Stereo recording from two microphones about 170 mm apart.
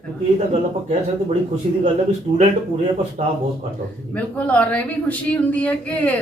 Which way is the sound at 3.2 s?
40° right (ahead or behind).